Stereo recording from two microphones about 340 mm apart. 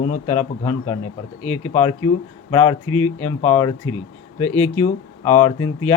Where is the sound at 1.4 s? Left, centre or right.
Left.